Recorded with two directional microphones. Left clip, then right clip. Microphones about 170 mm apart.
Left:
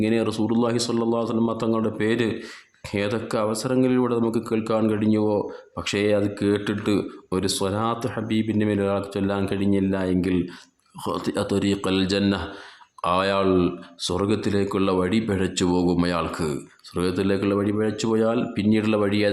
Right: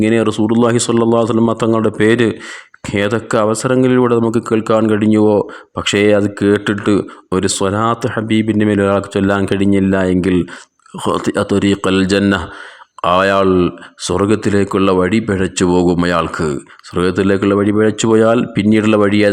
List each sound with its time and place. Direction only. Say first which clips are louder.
0.0 s speech: right 9 dB; 40° right (ahead or behind)